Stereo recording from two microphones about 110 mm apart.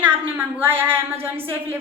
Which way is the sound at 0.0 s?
20° right (ahead or behind).